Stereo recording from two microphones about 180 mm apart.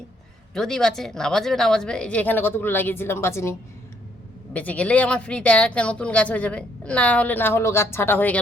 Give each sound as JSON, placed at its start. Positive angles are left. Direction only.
{"t": 0.5, "sound": "speech", "side_deg": 5}
{"t": 4.5, "sound": "speech", "side_deg": 10}